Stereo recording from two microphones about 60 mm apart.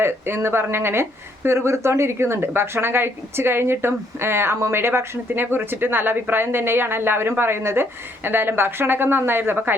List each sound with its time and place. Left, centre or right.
0.0 s a woman's voice: right